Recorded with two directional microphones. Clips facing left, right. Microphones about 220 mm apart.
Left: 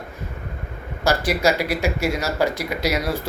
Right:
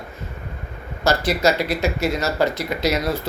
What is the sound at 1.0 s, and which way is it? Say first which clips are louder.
A man's voice: right 1 dB; 10° left (ahead or behind).